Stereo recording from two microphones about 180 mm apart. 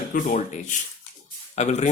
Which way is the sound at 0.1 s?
40° left (ahead or behind).